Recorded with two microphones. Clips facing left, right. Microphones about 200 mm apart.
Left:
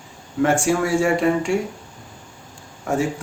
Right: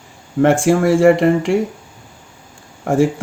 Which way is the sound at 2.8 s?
50° right (ahead or behind).